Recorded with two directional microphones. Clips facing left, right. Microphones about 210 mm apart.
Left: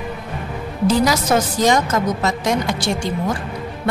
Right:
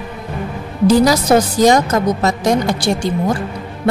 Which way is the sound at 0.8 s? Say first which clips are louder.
Right 5 dB; 35° right (ahead or behind).